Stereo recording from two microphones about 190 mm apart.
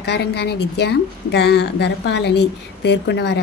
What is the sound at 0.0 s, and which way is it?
Speech, 60° left (ahead or behind).